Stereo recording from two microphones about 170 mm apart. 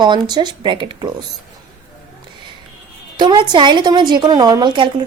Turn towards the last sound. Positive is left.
turn(degrees=-25)  # may be behind; listen again after turning